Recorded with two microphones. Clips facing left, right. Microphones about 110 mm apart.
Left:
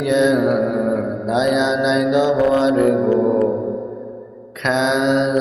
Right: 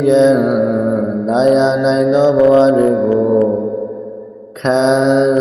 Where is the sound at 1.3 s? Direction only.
35° right (ahead or behind).